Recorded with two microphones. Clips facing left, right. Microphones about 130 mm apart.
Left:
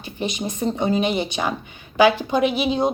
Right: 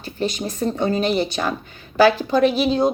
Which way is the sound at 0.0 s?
15° left (ahead or behind).